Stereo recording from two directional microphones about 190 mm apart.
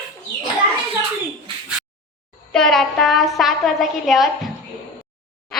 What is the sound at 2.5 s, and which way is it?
A woman's voice, 5° left (ahead or behind).